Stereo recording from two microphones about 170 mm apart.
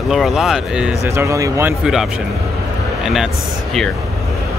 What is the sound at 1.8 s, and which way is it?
Speech, 5° right (ahead or behind).